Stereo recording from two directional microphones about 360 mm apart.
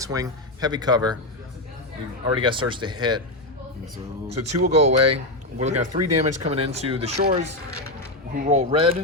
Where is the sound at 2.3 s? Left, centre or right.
Centre.